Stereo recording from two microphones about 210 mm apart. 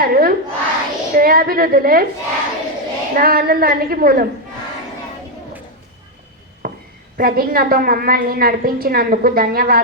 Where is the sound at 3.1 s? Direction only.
45° right (ahead or behind).